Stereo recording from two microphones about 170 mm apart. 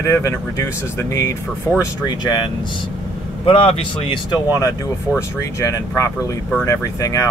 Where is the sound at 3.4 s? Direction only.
30° left (ahead or behind).